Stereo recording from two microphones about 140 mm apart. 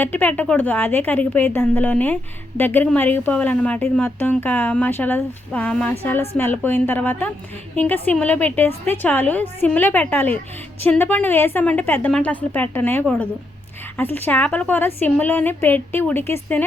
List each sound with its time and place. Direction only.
0.0 s speech: 10° left (ahead or behind)